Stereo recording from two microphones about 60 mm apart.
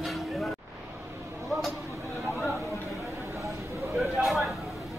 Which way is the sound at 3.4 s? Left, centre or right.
Right.